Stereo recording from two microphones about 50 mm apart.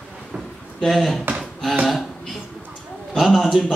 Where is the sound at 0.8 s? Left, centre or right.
Centre.